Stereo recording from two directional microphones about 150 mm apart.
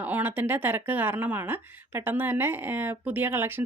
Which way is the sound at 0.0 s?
10° right (ahead or behind).